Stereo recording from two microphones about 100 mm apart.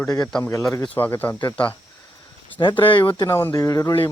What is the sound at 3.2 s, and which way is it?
Speech, 30° left (ahead or behind).